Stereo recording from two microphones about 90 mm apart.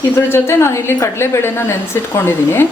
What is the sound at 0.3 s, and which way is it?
A woman's voice, 30° left (ahead or behind).